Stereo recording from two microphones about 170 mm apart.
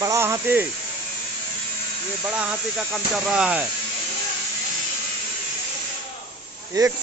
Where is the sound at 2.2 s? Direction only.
10° right (ahead or behind).